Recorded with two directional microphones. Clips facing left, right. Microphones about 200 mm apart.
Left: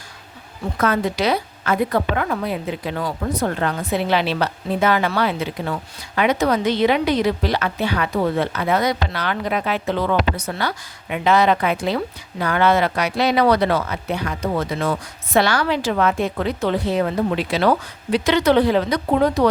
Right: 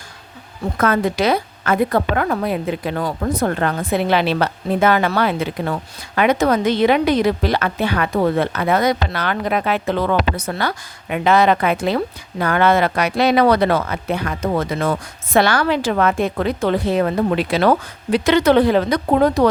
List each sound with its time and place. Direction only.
0.8 s a woman's voice: 50° right (ahead or behind)